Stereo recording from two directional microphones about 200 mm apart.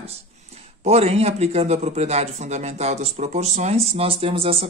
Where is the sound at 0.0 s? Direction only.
30° right (ahead or behind).